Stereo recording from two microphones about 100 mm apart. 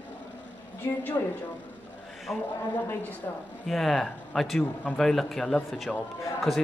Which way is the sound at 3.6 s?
Centre (ahead or behind).